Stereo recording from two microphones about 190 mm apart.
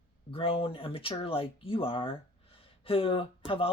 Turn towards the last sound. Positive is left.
turn(degrees=30)  # may be behind; listen again after turning